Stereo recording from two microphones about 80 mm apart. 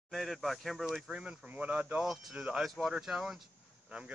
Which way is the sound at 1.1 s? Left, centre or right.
Centre.